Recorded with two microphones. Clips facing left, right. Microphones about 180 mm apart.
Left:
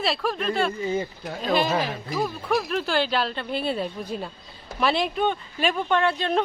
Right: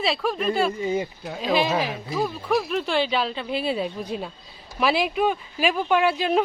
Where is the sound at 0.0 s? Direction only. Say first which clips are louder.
Right 2 dB; centre (ahead or behind).